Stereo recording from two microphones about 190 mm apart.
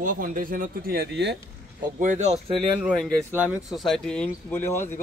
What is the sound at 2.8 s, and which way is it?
Speech, 5° right (ahead or behind).